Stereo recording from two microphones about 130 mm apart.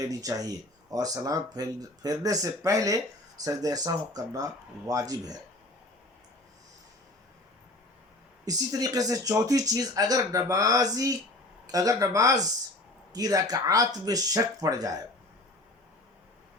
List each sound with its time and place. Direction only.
0.0 s speech: 25° right (ahead or behind)
8.4 s speech: 30° right (ahead or behind)